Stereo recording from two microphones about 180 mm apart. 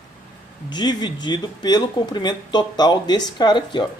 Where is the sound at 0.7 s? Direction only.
25° left (ahead or behind).